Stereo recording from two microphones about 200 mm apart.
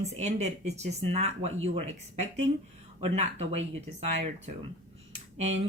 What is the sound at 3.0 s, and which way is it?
Speech, 30° right (ahead or behind).